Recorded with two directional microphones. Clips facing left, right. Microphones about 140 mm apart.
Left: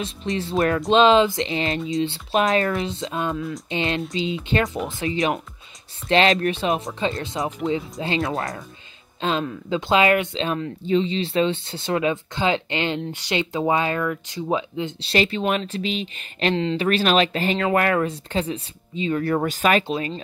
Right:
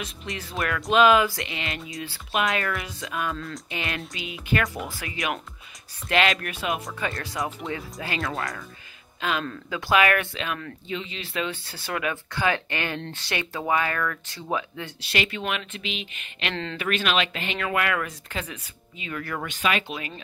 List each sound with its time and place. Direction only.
0.0 s speech: 30° left (ahead or behind)
3.3 s speech: 5° left (ahead or behind)
3.7 s speech: 25° left (ahead or behind)
19.9 s speech: 25° left (ahead or behind)